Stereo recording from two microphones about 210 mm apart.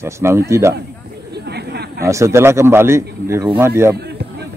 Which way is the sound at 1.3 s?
50° right (ahead or behind).